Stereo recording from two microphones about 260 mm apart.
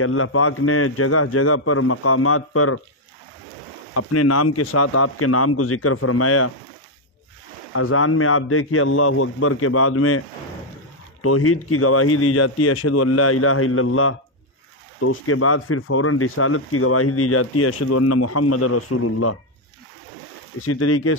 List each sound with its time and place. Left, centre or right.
0.0 s speech: left
3.9 s speech: left
7.7 s speech: left
11.2 s speech: left
20.6 s speech: left